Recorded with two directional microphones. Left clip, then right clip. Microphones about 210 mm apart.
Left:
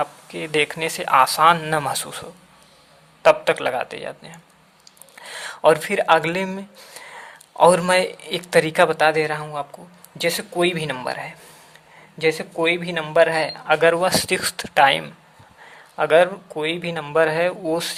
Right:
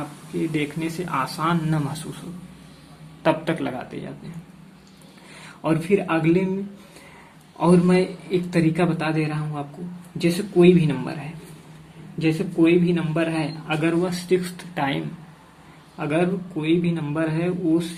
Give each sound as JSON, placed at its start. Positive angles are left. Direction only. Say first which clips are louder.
{"t": 0.3, "sound": "a man's voice", "louder": "left 5 dB", "side_deg": 45}
{"t": 3.2, "sound": "a man's voice", "louder": "left 6 dB", "side_deg": 40}
{"t": 5.6, "sound": "a man's voice", "louder": "left 6 dB", "side_deg": 50}
{"t": 7.6, "sound": "a man's voice", "louder": "left 5 dB", "side_deg": 50}